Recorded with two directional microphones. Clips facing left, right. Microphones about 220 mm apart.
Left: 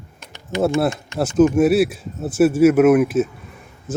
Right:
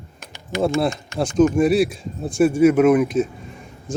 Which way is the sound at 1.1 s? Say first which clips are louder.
Left 2 dB; 5° left (ahead or behind).